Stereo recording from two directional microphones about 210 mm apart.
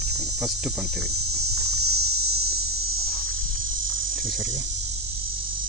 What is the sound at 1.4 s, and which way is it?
Cricket, 90° right.